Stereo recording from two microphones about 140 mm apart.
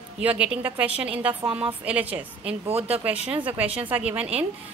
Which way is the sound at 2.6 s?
45° right (ahead or behind).